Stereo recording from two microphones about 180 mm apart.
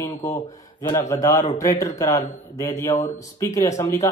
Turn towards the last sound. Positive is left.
turn(degrees=15)  # may be behind; listen again after turning